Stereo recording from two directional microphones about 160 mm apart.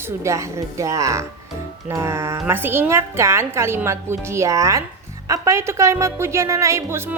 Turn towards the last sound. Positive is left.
turn(degrees=-15)  # may be behind; listen again after turning